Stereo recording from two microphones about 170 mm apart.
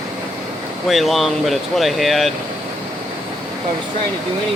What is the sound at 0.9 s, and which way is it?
Speech, centre (ahead or behind).